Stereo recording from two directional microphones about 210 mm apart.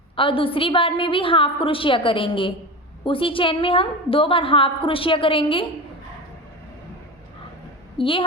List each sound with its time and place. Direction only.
0.2 s a woman's voice: 25° left (ahead or behind)
7.9 s a woman's voice: 25° left (ahead or behind)